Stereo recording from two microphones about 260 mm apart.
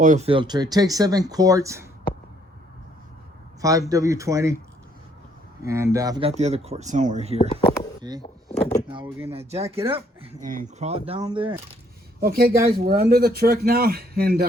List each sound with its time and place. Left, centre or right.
0.0 s speech: right; by 1.9 s centre
3.6 s speech: centre
5.6 s speech: centre; by 7.3 s right
7.3 s speech: left
8.9 s speech: centre
12.2 s speech: right